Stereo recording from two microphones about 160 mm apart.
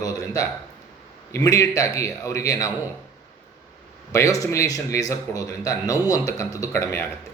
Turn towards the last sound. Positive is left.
turn(degrees=15)  # may be behind; listen again after turning